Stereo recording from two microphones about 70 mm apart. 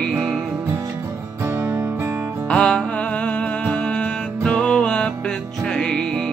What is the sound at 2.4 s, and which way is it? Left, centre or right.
Music, centre.